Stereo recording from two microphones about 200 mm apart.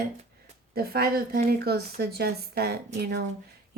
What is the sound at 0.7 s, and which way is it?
Speech, 50° right (ahead or behind).